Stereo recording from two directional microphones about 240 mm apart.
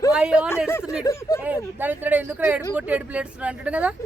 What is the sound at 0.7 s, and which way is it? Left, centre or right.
Speech, centre.